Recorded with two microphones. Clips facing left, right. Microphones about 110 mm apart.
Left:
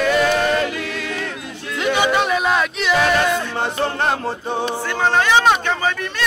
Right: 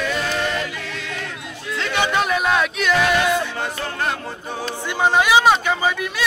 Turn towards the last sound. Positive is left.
turn(degrees=-5)  # may be behind; listen again after turning